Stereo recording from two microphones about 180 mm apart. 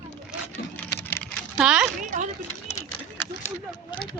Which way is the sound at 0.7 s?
10° left (ahead or behind).